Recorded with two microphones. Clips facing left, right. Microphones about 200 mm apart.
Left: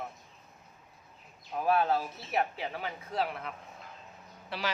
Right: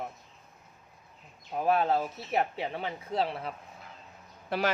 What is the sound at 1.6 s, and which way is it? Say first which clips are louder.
Speech: right 2 dB; 25° right (ahead or behind).